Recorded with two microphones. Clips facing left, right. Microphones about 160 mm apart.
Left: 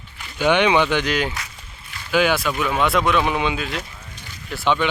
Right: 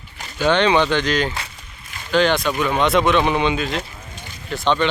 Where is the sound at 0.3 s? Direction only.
10° left (ahead or behind).